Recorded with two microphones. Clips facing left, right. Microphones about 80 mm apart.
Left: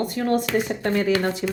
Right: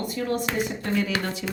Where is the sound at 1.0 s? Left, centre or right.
Left.